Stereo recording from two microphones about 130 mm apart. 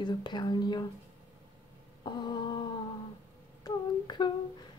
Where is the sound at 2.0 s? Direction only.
35° left (ahead or behind).